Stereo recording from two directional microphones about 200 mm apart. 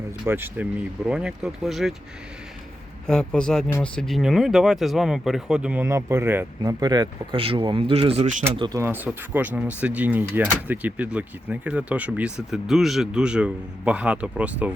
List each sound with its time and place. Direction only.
0.3 s speech: 10° right (ahead or behind)
3.1 s speech: 5° left (ahead or behind); by 8.4 s 35° right (ahead or behind)
8.5 s speech: 25° right (ahead or behind)
8.8 s speech: 10° right (ahead or behind)